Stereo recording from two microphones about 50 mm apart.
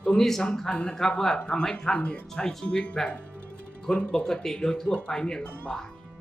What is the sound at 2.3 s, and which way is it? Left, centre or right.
Speech, centre.